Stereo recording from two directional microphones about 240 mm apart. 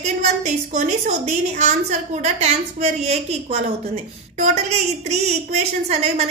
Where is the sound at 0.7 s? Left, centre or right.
Right.